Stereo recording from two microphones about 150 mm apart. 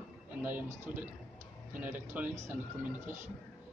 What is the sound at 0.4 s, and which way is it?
Speech, 10° right (ahead or behind).